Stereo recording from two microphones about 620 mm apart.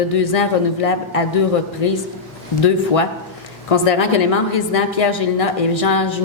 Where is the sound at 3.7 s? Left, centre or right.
Left.